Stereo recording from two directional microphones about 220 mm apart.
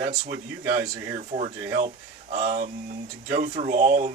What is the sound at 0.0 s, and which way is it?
Speech, 35° right (ahead or behind).